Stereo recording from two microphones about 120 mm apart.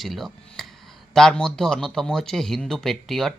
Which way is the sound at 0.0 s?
Centre (ahead or behind).